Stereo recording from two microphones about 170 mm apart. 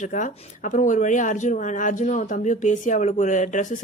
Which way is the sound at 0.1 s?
50° left (ahead or behind).